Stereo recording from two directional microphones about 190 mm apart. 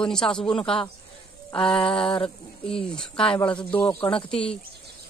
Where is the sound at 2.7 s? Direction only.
5° left (ahead or behind).